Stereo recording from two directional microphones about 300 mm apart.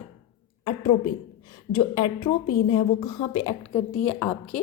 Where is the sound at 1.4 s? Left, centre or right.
Centre.